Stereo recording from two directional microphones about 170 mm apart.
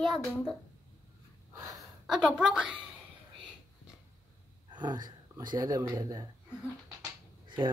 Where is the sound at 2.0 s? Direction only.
5° right (ahead or behind).